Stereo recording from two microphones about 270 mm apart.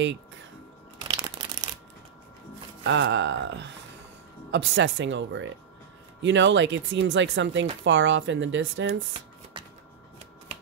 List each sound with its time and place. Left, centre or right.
0.9 s crumpling: centre
2.9 s speech: right